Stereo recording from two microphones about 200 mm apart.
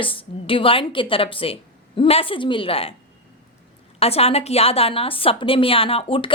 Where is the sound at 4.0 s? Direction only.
30° left (ahead or behind).